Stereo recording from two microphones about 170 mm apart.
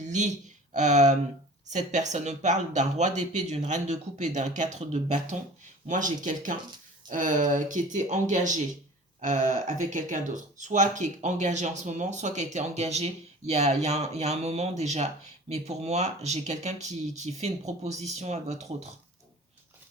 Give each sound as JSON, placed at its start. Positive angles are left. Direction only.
{"t": 0.0, "sound": "speech", "side_deg": -45}